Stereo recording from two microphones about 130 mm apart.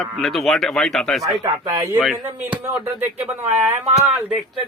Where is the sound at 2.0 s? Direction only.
10° right (ahead or behind).